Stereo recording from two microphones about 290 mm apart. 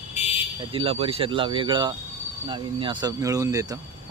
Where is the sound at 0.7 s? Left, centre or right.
Centre.